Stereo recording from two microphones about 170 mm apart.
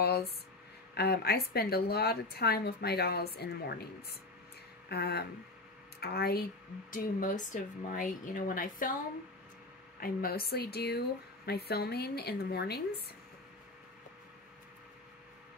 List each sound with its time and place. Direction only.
0.9 s a woman's voice: 70° left (ahead or behind)
4.8 s a woman's voice: 70° left (ahead or behind)
6.9 s speech: 50° left (ahead or behind)
9.9 s a woman's voice: 60° left (ahead or behind)